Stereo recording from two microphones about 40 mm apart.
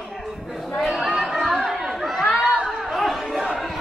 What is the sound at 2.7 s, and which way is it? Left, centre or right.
Chatter, centre.